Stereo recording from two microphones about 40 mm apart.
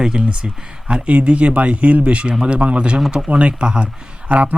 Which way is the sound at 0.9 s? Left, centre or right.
Right.